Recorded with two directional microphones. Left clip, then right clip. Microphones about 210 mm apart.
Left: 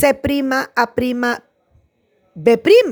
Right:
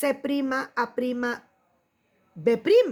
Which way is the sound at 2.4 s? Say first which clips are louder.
Left 9 dB; 40° left (ahead or behind).